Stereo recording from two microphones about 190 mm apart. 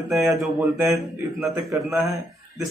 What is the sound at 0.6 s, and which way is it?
Speech, 15° right (ahead or behind).